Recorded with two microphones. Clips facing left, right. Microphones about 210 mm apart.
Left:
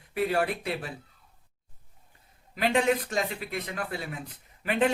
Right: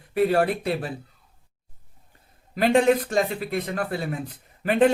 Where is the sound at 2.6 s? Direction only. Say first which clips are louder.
Right 6 dB; 40° right (ahead or behind).